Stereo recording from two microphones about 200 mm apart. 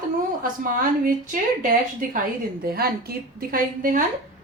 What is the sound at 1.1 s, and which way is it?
A woman's voice, 40° right (ahead or behind).